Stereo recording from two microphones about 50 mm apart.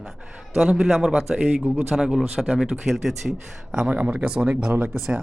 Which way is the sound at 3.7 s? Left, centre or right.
Right.